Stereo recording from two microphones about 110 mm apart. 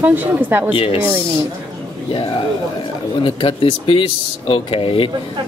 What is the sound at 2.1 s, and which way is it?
Speech, 55° left (ahead or behind).